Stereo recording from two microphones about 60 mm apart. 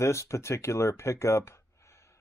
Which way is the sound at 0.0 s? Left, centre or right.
Left.